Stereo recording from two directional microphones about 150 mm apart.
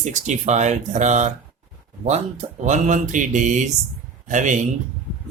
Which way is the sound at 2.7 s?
55° right (ahead or behind).